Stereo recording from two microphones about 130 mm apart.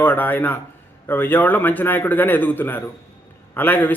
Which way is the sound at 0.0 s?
15° left (ahead or behind).